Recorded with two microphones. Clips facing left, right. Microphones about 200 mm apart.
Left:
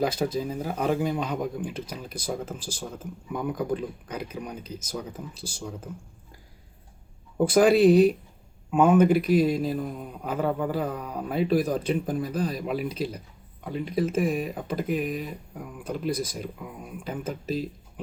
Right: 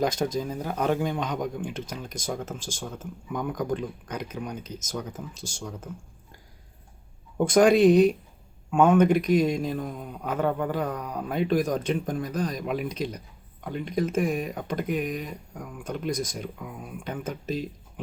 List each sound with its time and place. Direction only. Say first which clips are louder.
0.3 s a man's voice: even; 5° left (ahead or behind)
4.6 s speech: even; 30° left (ahead or behind)
7.3 s a man's voice: even; 5° left (ahead or behind)